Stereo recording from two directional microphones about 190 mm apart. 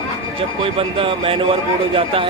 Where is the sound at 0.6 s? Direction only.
30° right (ahead or behind).